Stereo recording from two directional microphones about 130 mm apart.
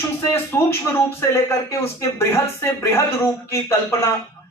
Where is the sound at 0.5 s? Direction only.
20° left (ahead or behind).